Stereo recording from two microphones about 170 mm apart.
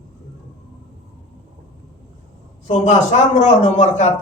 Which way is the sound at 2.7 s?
40° left (ahead or behind).